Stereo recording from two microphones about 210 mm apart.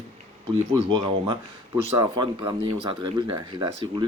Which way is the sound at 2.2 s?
20° right (ahead or behind).